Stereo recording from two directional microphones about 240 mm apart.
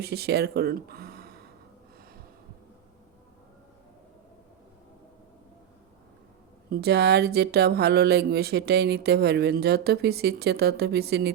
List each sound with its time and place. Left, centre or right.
0.0 s speech: right
6.7 s speech: right